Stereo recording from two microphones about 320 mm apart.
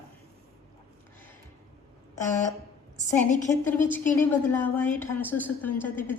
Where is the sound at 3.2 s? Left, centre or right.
Left.